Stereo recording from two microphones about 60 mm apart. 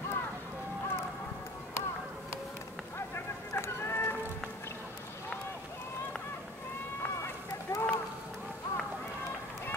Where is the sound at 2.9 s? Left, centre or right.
Left.